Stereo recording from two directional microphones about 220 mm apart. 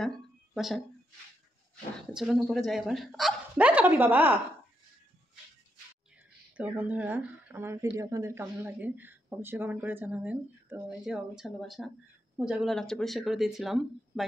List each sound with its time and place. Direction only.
0.6 s speech: centre (ahead or behind)
2.1 s speech: centre (ahead or behind)
6.5 s speech: 5° right (ahead or behind)